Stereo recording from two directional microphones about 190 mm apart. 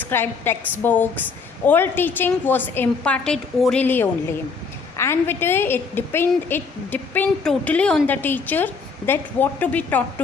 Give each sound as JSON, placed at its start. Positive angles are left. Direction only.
{"t": 0.0, "sound": "a woman's voice", "side_deg": 10}